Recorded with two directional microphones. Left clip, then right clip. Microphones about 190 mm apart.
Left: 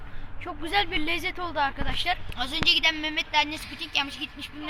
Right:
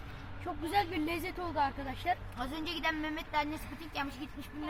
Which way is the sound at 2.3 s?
Centre (ahead or behind).